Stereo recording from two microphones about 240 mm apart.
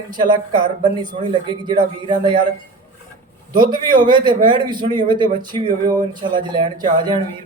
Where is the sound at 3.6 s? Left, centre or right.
Centre.